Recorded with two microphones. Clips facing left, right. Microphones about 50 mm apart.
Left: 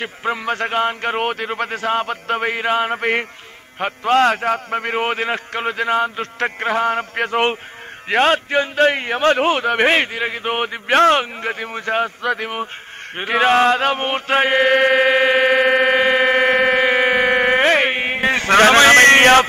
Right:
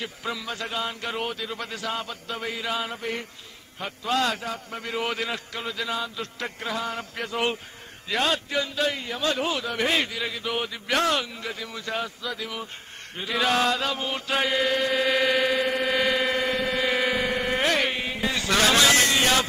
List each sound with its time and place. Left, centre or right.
0.0 s a man's voice: left
13.1 s chant: left